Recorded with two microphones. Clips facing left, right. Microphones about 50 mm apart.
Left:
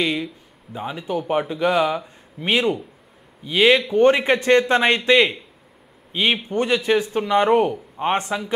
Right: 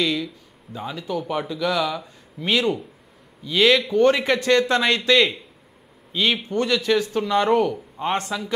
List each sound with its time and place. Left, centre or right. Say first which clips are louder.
0.0 s speech: left 1 dB; left